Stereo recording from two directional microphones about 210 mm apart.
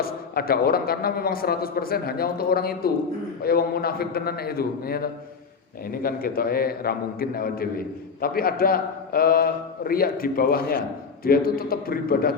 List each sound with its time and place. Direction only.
0.0 s a man's voice: 45° left (ahead or behind)